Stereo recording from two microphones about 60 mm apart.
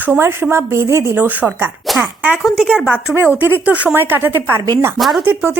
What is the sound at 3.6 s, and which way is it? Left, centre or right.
Speech, right.